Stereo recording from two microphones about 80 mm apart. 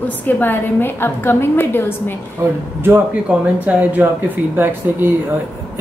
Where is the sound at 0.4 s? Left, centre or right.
Left.